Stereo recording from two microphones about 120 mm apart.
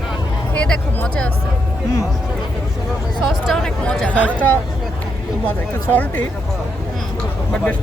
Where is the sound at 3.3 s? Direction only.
5° left (ahead or behind).